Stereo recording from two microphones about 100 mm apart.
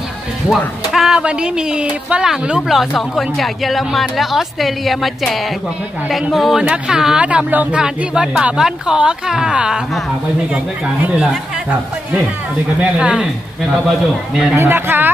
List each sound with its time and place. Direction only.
0.9 s a woman's voice: 5° right (ahead or behind)
12.7 s speech: 10° right (ahead or behind)
14.5 s speech: 25° right (ahead or behind)